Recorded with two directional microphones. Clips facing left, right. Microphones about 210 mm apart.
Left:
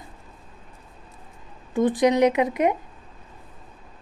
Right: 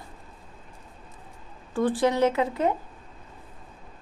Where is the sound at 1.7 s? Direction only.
20° left (ahead or behind).